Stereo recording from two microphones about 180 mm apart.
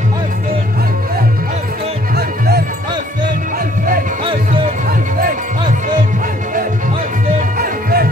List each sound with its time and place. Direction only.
2.1 s music: 60° right (ahead or behind)
3.5 s music: 50° right (ahead or behind)
4.2 s music: 25° right (ahead or behind)
7.5 s music: 55° right (ahead or behind)